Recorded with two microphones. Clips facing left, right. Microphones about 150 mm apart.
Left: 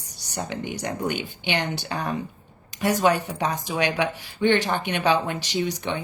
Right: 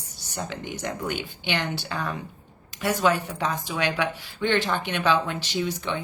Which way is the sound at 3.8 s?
20° left (ahead or behind).